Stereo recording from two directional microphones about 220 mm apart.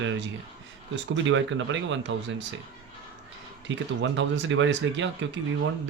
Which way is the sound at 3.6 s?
55° right (ahead or behind).